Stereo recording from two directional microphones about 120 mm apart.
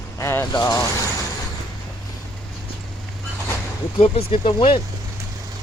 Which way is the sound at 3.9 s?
55° left (ahead or behind).